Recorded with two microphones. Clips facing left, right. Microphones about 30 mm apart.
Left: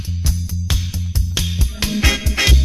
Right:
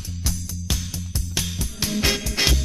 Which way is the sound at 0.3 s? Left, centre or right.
Left.